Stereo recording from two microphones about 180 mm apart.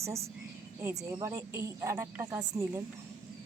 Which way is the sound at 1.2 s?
15° right (ahead or behind).